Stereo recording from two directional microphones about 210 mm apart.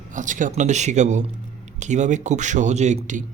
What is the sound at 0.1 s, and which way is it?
Speech, 35° right (ahead or behind).